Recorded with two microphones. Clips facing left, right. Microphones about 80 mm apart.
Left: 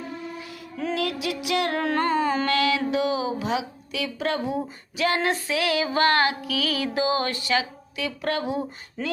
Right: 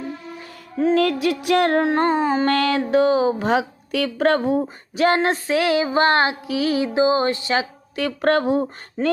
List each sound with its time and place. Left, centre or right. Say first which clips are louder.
0.9 s speech: right 8 dB; right
1.8 s music: right 4 dB; right
2.5 s speech: right 4 dB; right
7.9 s speech: right 8 dB; right